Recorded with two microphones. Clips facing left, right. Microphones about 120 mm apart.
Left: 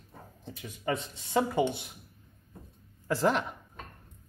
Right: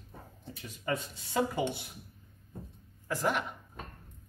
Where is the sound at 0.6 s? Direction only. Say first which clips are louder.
Left 2 dB; 20° left (ahead or behind).